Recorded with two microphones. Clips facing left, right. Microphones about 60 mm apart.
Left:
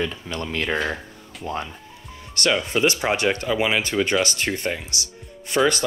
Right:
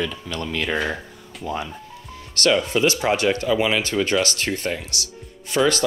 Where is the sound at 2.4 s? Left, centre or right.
Centre.